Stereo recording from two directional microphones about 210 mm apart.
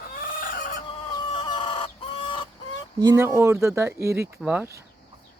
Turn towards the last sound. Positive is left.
turn(degrees=-10)  # may be behind; listen again after turning